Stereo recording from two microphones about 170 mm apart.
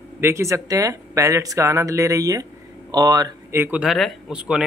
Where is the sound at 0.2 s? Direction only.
15° right (ahead or behind).